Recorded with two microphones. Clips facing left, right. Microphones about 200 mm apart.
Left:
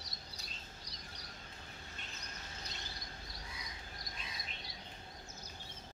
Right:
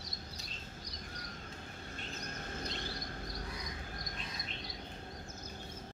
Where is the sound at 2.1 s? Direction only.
50° right (ahead or behind).